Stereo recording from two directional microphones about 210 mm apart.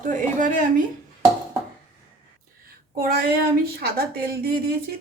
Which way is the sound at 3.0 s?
45° right (ahead or behind).